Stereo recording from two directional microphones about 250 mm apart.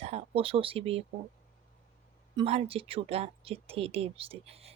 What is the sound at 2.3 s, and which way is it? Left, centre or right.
Speech, right.